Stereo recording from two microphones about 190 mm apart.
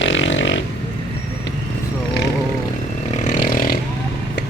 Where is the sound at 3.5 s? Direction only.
50° left (ahead or behind).